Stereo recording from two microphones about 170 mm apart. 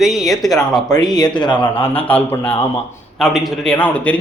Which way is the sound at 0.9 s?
25° left (ahead or behind).